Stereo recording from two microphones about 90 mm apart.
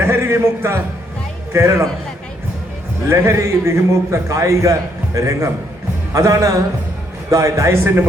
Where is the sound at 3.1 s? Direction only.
35° right (ahead or behind).